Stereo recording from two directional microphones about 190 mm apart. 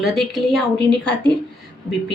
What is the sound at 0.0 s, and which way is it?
Speech, centre (ahead or behind).